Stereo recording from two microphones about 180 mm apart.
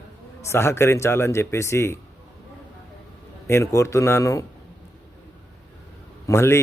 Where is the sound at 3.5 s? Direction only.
15° left (ahead or behind).